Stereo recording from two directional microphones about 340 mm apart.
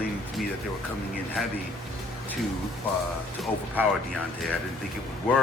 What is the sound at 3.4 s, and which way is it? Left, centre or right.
Speech, centre.